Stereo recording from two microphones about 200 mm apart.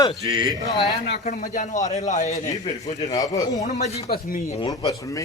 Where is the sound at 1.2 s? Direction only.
40° left (ahead or behind).